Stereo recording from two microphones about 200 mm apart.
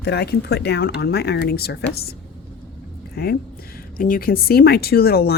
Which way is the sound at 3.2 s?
50° left (ahead or behind).